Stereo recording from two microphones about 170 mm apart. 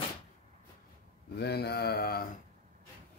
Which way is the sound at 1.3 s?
70° left (ahead or behind).